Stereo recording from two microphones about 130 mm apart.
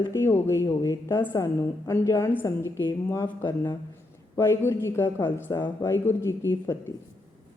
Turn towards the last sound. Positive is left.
turn(degrees=20)  # may be behind; listen again after turning